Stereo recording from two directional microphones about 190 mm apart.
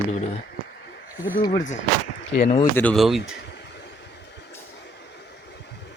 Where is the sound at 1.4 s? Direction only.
50° left (ahead or behind).